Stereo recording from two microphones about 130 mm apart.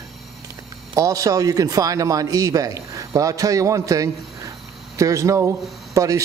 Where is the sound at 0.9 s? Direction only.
25° right (ahead or behind).